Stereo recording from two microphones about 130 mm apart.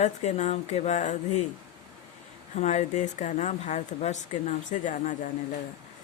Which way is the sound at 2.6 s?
65° left (ahead or behind).